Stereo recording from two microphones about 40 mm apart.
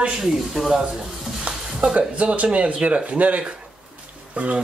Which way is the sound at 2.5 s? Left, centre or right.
Right.